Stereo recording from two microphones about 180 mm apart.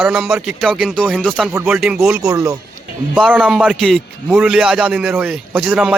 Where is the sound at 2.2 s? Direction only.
20° right (ahead or behind).